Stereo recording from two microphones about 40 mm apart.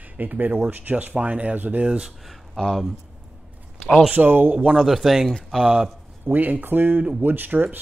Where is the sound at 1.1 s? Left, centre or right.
Right.